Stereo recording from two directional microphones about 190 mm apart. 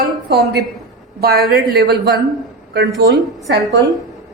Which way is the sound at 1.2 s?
55° right (ahead or behind).